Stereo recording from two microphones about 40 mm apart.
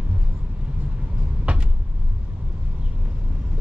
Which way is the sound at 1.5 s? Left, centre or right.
Right.